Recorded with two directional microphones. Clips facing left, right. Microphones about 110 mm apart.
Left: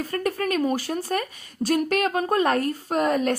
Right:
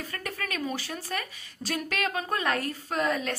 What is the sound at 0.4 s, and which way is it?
A woman's voice, 50° left (ahead or behind).